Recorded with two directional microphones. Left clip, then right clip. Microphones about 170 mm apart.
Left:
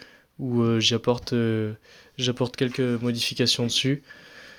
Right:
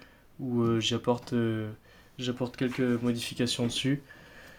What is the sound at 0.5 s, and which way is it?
Speech, 60° left (ahead or behind).